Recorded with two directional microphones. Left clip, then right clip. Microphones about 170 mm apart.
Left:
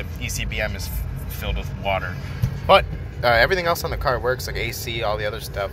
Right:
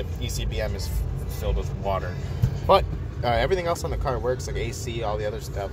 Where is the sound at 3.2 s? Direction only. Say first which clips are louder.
Left 6 dB; centre (ahead or behind).